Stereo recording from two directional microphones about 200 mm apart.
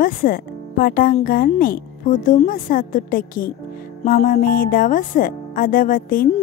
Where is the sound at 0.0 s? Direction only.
45° left (ahead or behind).